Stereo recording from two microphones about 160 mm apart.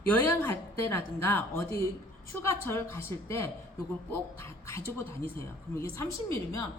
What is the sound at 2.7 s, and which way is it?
Speech, 15° left (ahead or behind).